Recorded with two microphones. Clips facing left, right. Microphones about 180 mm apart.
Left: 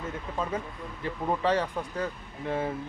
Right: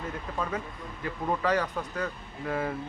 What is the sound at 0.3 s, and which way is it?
Speech, 25° left (ahead or behind).